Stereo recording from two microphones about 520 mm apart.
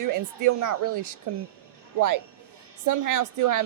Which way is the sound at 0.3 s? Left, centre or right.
Right.